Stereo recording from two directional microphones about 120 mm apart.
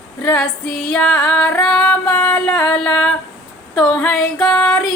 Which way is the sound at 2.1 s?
25° left (ahead or behind).